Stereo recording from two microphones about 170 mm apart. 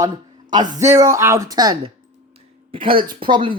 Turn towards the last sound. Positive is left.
turn(degrees=-30)  # may be behind; listen again after turning